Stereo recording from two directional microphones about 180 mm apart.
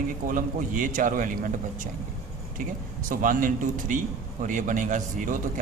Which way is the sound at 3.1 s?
50° right (ahead or behind).